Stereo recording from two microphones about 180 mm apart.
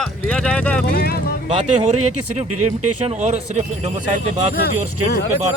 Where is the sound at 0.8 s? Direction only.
55° left (ahead or behind).